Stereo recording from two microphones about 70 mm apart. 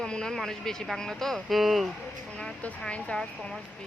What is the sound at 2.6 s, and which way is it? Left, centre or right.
Speech, centre.